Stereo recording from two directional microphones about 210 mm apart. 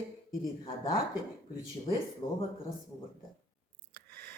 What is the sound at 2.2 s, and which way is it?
Speech, 20° left (ahead or behind).